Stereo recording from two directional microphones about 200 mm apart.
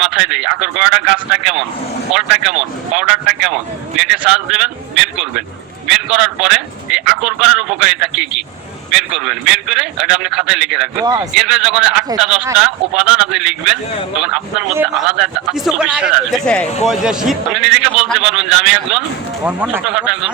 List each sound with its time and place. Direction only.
0.0 s speech: 5° right (ahead or behind)
11.0 s speech: 20° right (ahead or behind)
11.3 s speech: 5° right (ahead or behind)